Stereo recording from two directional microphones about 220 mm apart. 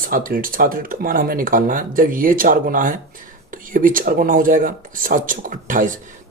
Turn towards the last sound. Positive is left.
turn(degrees=-35)  # may be behind; listen again after turning